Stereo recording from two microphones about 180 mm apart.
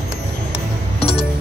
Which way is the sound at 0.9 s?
35° left (ahead or behind).